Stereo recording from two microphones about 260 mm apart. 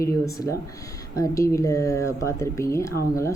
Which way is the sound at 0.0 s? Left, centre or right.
Centre.